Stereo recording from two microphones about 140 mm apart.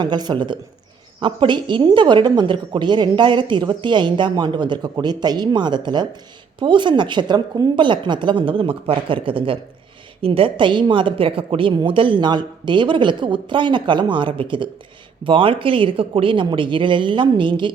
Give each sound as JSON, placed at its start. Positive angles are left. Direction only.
{"t": 0.0, "sound": "speech", "side_deg": -30}